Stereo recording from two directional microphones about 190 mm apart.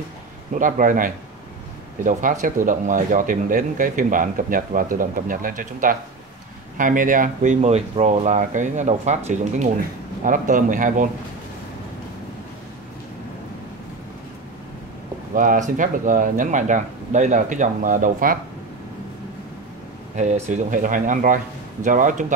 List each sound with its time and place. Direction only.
0.6 s speech: 45° right (ahead or behind)
15.3 s speech: 45° right (ahead or behind)
20.2 s speech: 40° right (ahead or behind)